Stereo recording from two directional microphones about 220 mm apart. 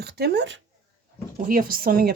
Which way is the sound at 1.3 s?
40° right (ahead or behind).